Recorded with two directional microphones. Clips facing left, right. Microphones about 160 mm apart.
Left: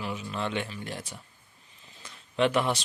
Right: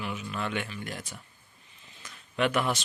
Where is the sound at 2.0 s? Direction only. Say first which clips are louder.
Left 2 dB; 30° left (ahead or behind).